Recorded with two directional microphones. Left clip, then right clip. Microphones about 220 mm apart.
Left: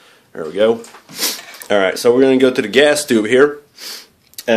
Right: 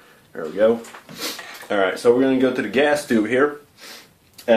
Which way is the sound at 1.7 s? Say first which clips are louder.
Left 4 dB; 45° left (ahead or behind).